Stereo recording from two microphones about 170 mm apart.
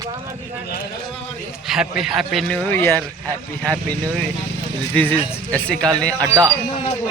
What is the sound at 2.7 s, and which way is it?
Speech, 15° left (ahead or behind).